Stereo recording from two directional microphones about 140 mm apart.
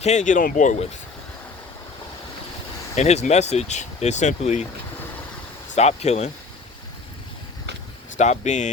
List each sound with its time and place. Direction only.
0.0 s speech: 55° left (ahead or behind)
2.9 s speech: 55° left (ahead or behind)
5.7 s speech: 50° left (ahead or behind)
8.2 s speech: 60° left (ahead or behind)